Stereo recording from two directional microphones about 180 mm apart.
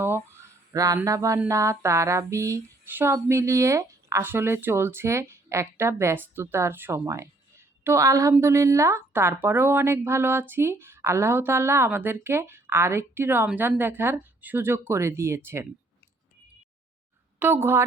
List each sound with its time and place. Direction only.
0.0 s a sound: 15° right (ahead or behind)
1.4 s speech: 15° right (ahead or behind)
17.4 s speech: 15° right (ahead or behind)